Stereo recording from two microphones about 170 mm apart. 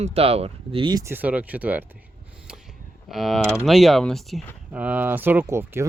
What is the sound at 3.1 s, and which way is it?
Speech, centre (ahead or behind).